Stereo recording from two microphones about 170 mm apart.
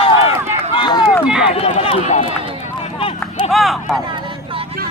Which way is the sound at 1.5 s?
35° left (ahead or behind).